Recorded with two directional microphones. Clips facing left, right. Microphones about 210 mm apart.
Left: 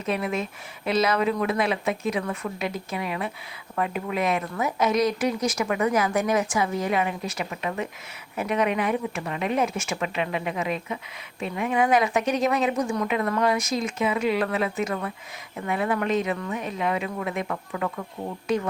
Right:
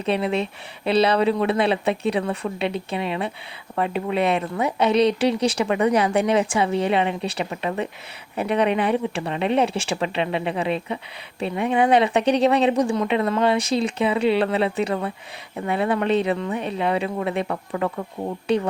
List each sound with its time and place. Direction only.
0.0 s speech: 30° right (ahead or behind)